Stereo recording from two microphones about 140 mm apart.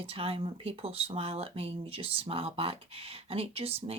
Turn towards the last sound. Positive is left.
turn(degrees=-45)  # may be behind; listen again after turning